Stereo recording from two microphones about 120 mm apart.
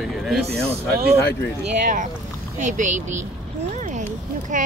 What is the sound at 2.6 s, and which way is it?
Speech, 90° right.